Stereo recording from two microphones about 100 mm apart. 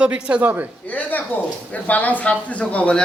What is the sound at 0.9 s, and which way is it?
Speech, 15° left (ahead or behind).